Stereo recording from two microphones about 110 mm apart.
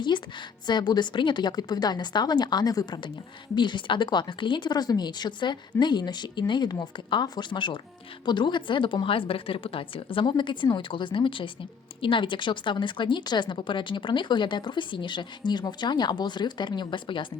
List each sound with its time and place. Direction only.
0.1 s a woman's voice: 45° left (ahead or behind)